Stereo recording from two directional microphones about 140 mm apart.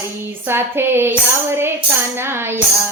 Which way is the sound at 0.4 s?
15° right (ahead or behind).